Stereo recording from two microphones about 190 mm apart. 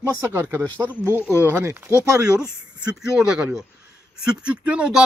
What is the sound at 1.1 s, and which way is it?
Speech, 10° right (ahead or behind).